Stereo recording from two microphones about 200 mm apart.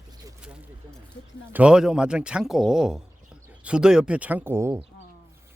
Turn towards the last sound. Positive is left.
turn(degrees=-10)  # may be behind; listen again after turning